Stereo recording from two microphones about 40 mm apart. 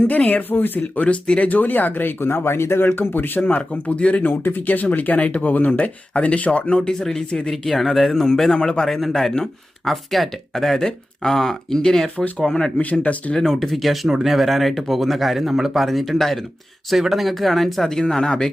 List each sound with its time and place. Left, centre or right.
0.1 s speech: left
0.5 s speech: left
1.0 s speech: left
1.5 s speech: left
2.8 s speech: left
3.7 s a man's voice: left
4.2 s speech: left
6.8 s a man's voice: centre
7.5 s a man's voice: centre
12.8 s speech: left
13.3 s speech: centre
17.8 s speech: centre